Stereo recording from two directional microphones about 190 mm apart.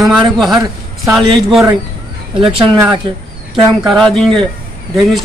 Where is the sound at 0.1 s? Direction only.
Centre (ahead or behind).